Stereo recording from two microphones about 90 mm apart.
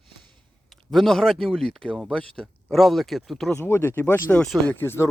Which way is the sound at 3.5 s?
25° left (ahead or behind).